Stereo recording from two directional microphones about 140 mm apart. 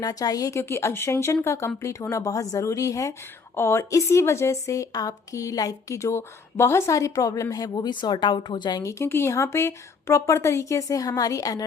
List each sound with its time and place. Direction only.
0.0 s a woman's voice: 25° left (ahead or behind)